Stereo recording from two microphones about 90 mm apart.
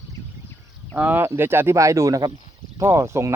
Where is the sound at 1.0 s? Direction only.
20° right (ahead or behind).